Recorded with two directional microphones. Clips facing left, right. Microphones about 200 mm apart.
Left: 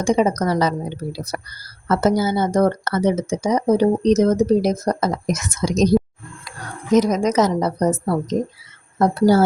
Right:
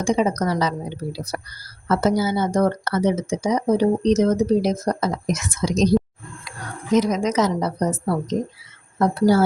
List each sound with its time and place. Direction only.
0.0 s speech: 45° left (ahead or behind)
6.9 s speech: 40° left (ahead or behind)